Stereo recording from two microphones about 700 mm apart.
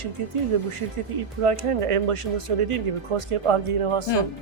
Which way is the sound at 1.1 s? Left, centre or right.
Right.